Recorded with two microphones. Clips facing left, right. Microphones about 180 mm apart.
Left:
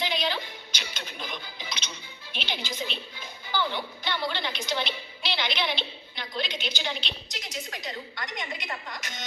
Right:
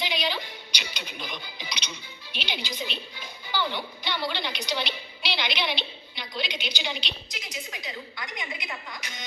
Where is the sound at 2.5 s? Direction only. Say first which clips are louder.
Even; centre (ahead or behind).